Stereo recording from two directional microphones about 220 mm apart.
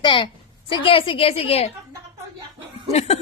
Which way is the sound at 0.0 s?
25° left (ahead or behind).